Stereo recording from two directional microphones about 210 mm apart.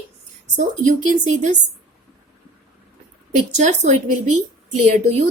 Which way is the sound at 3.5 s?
35° right (ahead or behind).